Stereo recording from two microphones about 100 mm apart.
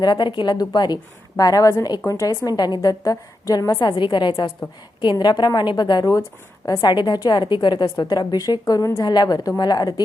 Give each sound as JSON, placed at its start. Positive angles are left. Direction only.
{"t": 0.0, "sound": "a woman's voice", "side_deg": 50}